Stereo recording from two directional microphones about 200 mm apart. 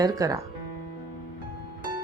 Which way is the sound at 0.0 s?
15° right (ahead or behind).